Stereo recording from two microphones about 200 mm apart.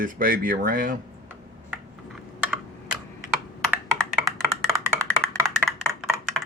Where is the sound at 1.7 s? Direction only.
5° right (ahead or behind).